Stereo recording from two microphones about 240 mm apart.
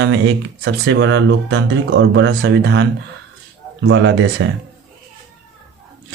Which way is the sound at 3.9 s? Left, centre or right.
Right.